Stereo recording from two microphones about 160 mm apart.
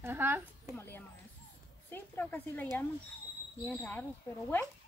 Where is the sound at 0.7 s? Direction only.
15° left (ahead or behind).